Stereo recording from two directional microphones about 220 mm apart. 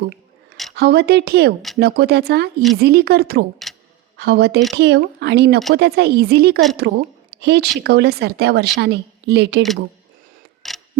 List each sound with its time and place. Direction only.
0.8 s a woman's voice: 45° right (ahead or behind)
10.6 s clock: centre (ahead or behind)